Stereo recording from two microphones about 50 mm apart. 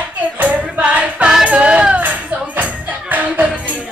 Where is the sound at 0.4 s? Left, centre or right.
Right.